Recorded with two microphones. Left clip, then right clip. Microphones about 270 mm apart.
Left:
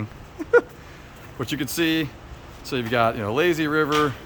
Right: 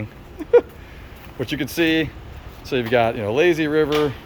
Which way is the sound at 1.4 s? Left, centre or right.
Centre.